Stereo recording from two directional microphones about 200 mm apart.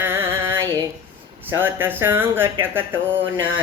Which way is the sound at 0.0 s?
10° right (ahead or behind).